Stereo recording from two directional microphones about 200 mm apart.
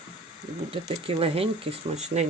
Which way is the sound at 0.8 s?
25° right (ahead or behind).